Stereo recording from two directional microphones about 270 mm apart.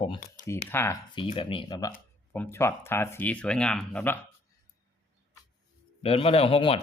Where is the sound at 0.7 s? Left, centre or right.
Centre.